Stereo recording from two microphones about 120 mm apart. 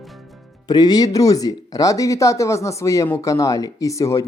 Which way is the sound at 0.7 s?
35° left (ahead or behind).